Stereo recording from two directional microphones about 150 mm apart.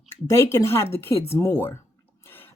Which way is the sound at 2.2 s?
15° left (ahead or behind).